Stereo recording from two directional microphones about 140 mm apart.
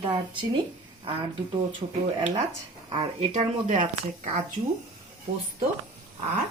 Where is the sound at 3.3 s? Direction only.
60° right (ahead or behind).